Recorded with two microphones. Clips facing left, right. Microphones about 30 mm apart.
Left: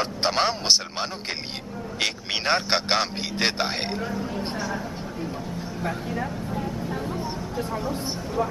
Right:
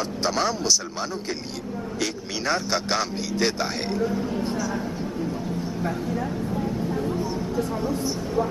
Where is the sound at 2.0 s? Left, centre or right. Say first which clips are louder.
Left 2 dB; left.